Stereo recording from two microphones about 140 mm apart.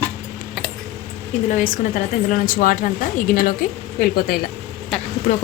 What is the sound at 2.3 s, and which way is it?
A woman's voice, 85° left.